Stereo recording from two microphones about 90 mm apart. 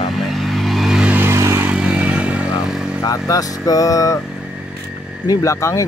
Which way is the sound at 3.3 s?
40° left (ahead or behind).